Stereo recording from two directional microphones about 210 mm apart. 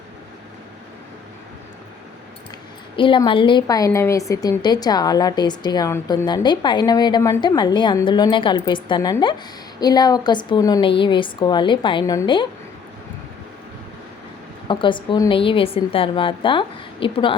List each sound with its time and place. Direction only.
2.9 s a woman's voice: 25° left (ahead or behind)
14.7 s a woman's voice: 25° left (ahead or behind)